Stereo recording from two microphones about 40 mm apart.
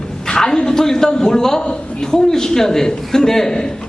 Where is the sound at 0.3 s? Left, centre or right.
Centre.